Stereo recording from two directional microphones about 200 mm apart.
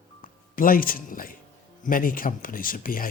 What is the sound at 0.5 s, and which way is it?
Speech, 45° left (ahead or behind).